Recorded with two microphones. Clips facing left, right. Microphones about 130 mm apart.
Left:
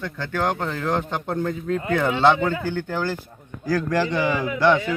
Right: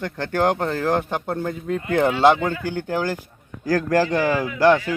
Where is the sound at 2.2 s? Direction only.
10° right (ahead or behind).